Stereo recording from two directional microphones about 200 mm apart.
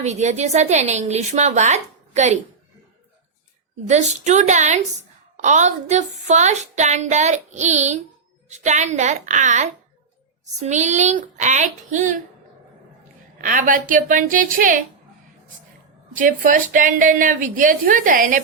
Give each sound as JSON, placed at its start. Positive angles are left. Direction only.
{"t": 0.0, "sound": "a woman's voice", "side_deg": -35}
{"t": 3.8, "sound": "a woman's voice", "side_deg": -35}
{"t": 13.4, "sound": "a woman's voice", "side_deg": -40}
{"t": 16.1, "sound": "a woman's voice", "side_deg": -40}